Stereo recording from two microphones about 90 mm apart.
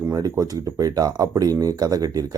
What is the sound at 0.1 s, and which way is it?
Speech, 35° right (ahead or behind).